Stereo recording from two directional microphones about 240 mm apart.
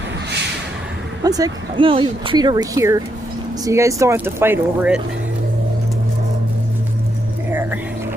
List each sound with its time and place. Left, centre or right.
1.2 s speech: centre